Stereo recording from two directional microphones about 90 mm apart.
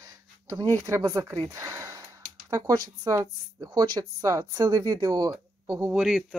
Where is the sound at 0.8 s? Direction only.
40° right (ahead or behind).